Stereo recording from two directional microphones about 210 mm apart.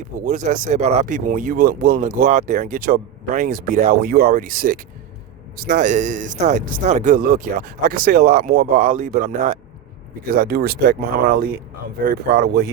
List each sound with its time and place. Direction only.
0.3 s speech: 35° right (ahead or behind)